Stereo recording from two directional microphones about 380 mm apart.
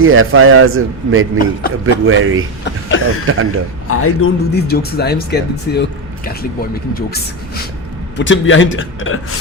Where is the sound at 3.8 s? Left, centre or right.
Left.